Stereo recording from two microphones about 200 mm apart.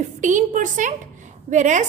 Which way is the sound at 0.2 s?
40° right (ahead or behind).